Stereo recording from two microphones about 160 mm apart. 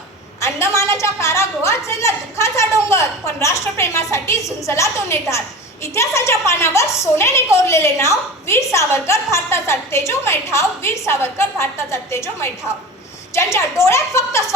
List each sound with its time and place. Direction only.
0.3 s a woman's voice: 20° left (ahead or behind)